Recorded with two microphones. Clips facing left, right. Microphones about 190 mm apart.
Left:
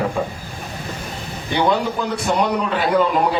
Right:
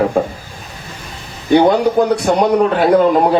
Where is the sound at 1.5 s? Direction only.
45° right (ahead or behind).